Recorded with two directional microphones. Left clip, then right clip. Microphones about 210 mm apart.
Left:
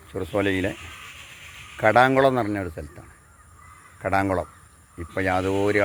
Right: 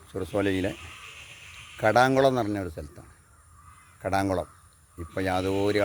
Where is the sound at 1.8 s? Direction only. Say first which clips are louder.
Left 4 dB; centre (ahead or behind).